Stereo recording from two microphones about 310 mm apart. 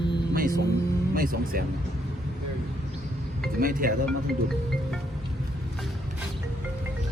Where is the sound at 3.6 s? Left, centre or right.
Right.